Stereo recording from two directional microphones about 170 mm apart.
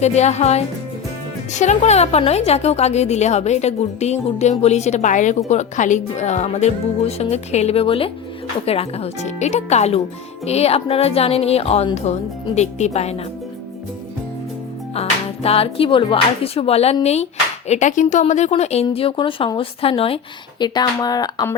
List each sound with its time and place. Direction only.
0.0 s a woman's voice: 40° left (ahead or behind)
15.0 s music: 35° left (ahead or behind)
15.4 s a woman's voice: 35° left (ahead or behind)